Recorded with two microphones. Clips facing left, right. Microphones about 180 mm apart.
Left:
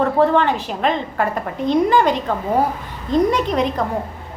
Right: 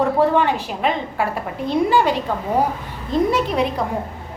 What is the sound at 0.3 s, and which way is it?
A woman's voice, 10° right (ahead or behind).